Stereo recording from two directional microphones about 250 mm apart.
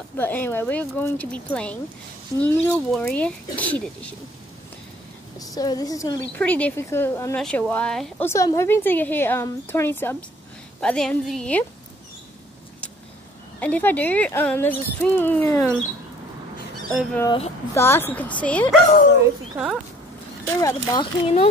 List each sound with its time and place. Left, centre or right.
0.2 s speech: centre
5.4 s speech: centre
13.6 s speech: centre
17.1 s speech: centre
19.2 s speech: centre
20.4 s speech: centre